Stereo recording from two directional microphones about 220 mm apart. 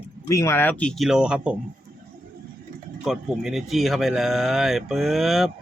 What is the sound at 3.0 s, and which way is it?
Speech, centre (ahead or behind).